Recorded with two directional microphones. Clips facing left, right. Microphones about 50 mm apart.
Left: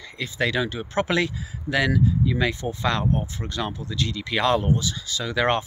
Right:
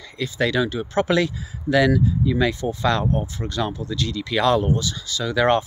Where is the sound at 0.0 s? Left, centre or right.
Left.